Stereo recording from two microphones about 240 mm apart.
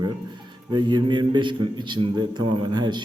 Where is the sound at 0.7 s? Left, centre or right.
Centre.